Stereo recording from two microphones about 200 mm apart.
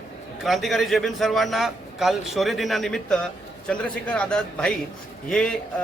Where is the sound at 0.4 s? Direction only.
Centre (ahead or behind).